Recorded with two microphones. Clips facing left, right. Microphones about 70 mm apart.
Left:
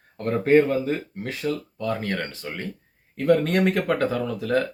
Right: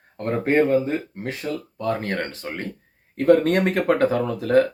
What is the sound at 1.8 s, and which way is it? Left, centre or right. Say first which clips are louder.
Speech: right 2 dB; right.